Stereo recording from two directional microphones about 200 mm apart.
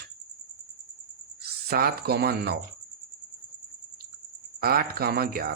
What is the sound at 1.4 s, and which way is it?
Speech, 50° right (ahead or behind).